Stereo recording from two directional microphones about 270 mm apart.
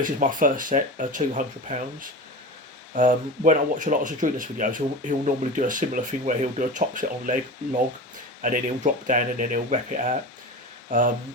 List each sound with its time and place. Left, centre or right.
0.0 s speech: right
8.4 s speech: right